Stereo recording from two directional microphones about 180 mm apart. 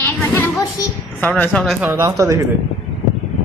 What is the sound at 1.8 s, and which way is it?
Speech, 10° right (ahead or behind).